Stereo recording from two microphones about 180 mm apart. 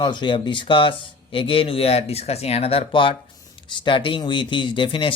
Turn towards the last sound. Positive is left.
turn(degrees=30)  # may be behind; listen again after turning